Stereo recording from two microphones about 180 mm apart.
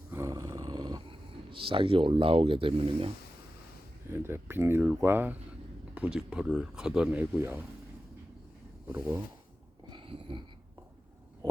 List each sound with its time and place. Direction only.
0.1 s dog: 15° right (ahead or behind)
1.5 s speech: 30° right (ahead or behind)
4.1 s speech: 15° right (ahead or behind)
8.9 s speech: 10° right (ahead or behind)
9.9 s a sound: 30° right (ahead or behind)